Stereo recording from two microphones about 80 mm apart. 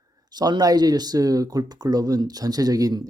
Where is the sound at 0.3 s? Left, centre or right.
Right.